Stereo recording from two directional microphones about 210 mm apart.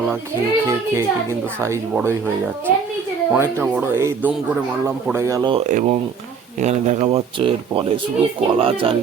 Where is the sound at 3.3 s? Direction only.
10° right (ahead or behind).